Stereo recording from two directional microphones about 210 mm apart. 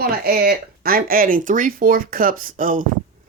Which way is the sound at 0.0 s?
45° right (ahead or behind).